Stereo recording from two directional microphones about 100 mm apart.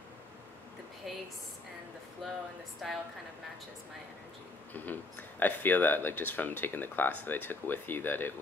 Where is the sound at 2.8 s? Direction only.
Centre (ahead or behind).